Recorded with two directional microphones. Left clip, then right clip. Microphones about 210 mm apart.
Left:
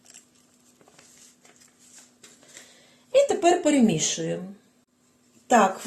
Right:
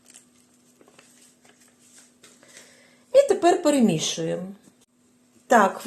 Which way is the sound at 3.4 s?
25° right (ahead or behind).